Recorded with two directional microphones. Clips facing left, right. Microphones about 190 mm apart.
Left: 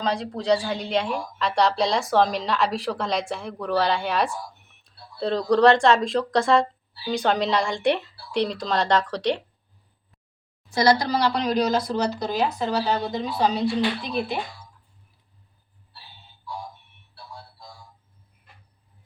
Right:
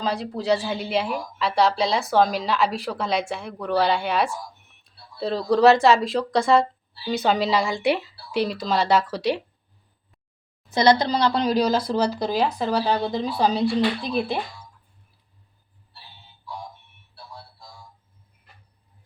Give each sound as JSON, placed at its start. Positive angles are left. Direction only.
{"t": 0.0, "sound": "speech", "side_deg": -5}
{"t": 10.7, "sound": "a woman's voice", "side_deg": -20}